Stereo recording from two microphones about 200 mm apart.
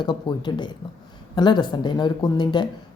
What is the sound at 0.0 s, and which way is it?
A woman's voice, 20° left (ahead or behind).